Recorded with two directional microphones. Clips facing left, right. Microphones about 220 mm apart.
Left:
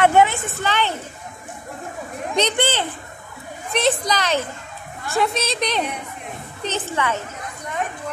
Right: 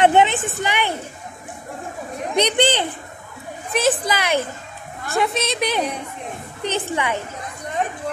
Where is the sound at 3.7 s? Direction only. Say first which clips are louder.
Right 1 dB; centre (ahead or behind).